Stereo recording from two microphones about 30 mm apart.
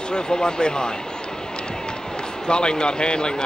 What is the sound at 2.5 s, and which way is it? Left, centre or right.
Speech, left.